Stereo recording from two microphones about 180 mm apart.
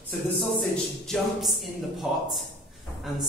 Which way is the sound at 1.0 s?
Centre (ahead or behind).